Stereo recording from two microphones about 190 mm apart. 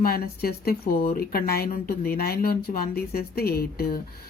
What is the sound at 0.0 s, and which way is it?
Speech, 50° left (ahead or behind).